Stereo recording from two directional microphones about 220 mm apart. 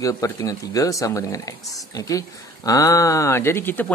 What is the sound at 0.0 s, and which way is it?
Speech, 15° left (ahead or behind).